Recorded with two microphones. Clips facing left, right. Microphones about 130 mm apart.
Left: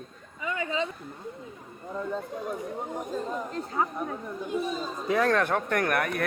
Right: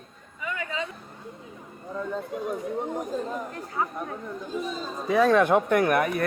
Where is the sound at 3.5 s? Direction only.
25° left (ahead or behind).